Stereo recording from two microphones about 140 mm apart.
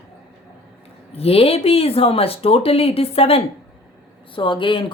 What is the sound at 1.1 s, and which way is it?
Speech, 45° left (ahead or behind).